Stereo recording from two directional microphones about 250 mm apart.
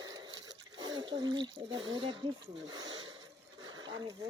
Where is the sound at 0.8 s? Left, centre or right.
Centre.